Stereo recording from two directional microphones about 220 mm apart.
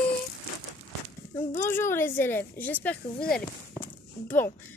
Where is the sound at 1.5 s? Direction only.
10° left (ahead or behind).